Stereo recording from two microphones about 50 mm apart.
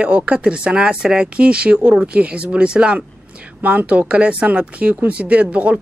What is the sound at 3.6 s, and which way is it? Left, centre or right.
Speech, right.